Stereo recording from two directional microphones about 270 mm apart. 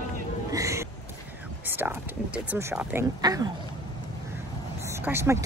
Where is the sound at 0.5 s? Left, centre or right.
Centre.